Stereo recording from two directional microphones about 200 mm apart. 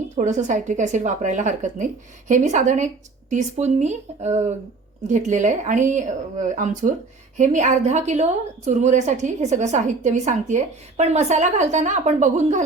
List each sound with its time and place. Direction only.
0.2 s a woman's voice: 35° right (ahead or behind)